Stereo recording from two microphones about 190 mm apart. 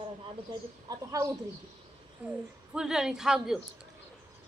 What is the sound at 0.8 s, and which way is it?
Speech, 20° right (ahead or behind).